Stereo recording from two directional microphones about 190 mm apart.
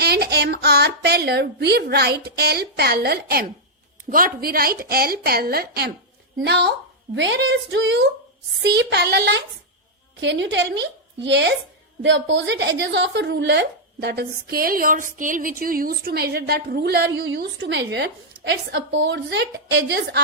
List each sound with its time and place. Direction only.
0.0 s a woman's voice: 55° right (ahead or behind)